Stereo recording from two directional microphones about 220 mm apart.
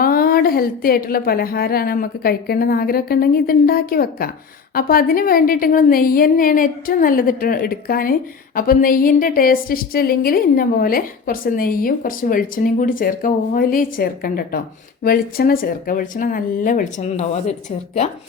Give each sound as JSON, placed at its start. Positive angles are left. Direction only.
{"t": 0.0, "sound": "a woman's voice", "side_deg": 40}